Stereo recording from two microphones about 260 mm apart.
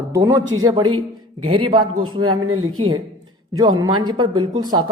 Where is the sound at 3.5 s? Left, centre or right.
Centre.